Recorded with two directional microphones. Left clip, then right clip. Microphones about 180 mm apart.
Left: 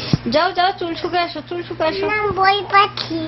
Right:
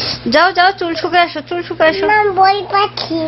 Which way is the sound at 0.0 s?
20° right (ahead or behind).